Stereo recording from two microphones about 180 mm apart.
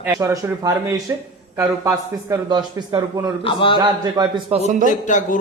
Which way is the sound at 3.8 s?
25° right (ahead or behind).